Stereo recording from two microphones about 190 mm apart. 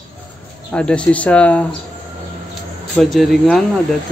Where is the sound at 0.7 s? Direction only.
5° left (ahead or behind).